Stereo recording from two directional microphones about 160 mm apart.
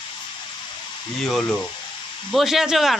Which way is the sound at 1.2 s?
Centre (ahead or behind).